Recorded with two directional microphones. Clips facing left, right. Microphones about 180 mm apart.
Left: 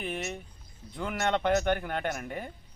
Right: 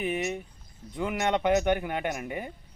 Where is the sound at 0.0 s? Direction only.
5° right (ahead or behind).